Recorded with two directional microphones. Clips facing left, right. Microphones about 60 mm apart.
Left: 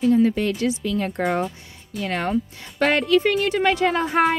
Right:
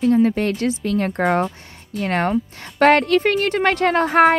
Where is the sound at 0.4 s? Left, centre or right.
Right.